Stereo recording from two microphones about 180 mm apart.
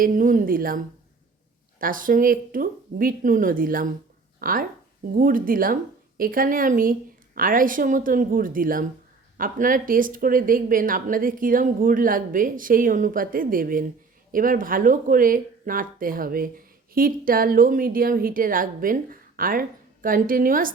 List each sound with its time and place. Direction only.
0.0 s a woman's voice: 50° right (ahead or behind)